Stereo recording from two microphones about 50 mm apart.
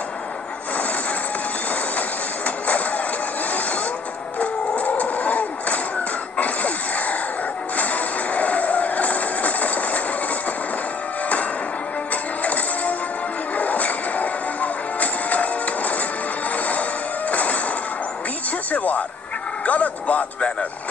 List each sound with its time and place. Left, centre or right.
2.0 s train: left
4.4 s a sound: left
6.4 s throat clearing: left
7.7 s music: left
13.6 s music: left
18.7 s a sound: left
19.6 s music: left